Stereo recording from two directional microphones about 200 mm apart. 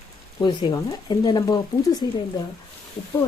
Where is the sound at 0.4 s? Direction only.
20° left (ahead or behind).